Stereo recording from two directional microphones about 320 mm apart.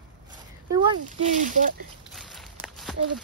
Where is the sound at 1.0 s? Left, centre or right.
Right.